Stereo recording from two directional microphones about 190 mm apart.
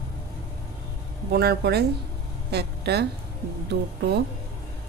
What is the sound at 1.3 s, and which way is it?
A woman's voice, 55° right (ahead or behind).